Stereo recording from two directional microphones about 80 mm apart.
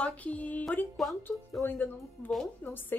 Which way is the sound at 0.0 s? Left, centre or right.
Centre.